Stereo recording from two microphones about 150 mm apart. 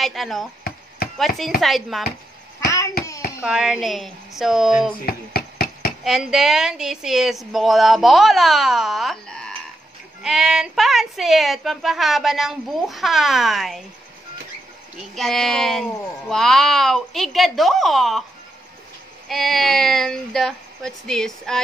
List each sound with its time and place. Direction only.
0.0 s a woman's voice: centre (ahead or behind)
2.6 s hands: 20° left (ahead or behind)
3.4 s a woman's voice: 5° right (ahead or behind)
5.0 s chop: 90° left
6.0 s a woman's voice: 5° right (ahead or behind)
15.0 s a woman's voice: centre (ahead or behind)
19.2 s a woman's voice: centre (ahead or behind)